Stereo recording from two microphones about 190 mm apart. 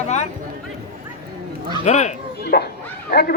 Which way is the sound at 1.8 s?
35° left (ahead or behind).